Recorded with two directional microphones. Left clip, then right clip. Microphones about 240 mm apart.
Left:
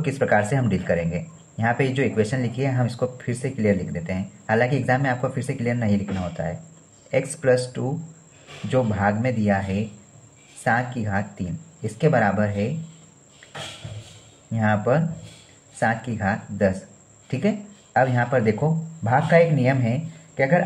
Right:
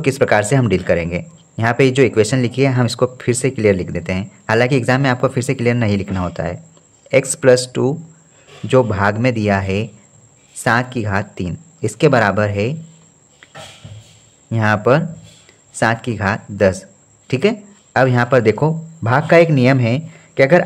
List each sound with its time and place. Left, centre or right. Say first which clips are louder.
0.0 s speech: right 6 dB; right
14.5 s speech: right 7 dB; right